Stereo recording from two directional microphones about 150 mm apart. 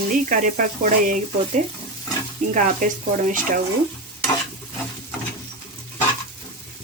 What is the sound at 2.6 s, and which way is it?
Speech, 60° right (ahead or behind).